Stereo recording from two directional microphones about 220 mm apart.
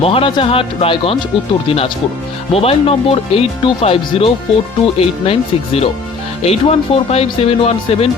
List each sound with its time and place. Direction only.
0.0 s speech: 25° left (ahead or behind)